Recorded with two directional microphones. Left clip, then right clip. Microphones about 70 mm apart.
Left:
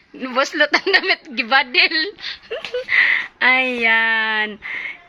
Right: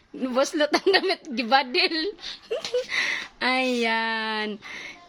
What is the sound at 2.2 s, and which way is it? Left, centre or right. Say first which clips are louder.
Speech: left 3 dB; right.